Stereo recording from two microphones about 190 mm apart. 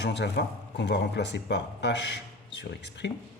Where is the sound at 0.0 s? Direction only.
60° left (ahead or behind).